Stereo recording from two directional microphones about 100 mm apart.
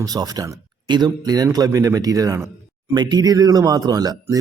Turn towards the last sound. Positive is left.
turn(degrees=-40)  # may be behind; listen again after turning